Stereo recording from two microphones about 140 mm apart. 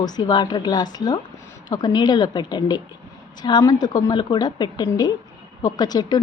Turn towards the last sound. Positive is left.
turn(degrees=30)  # may be behind; listen again after turning